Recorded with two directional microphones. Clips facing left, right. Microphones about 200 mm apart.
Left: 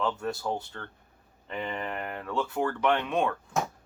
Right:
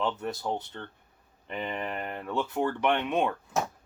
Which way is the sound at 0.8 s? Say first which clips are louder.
Right 1 dB; 25° right (ahead or behind).